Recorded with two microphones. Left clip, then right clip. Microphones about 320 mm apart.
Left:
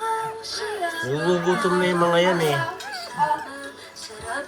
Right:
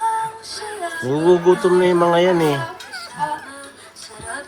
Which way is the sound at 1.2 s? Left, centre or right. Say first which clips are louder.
Right 8 dB; centre.